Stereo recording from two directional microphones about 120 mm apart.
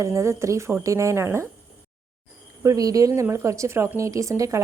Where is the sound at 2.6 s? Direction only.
30° right (ahead or behind).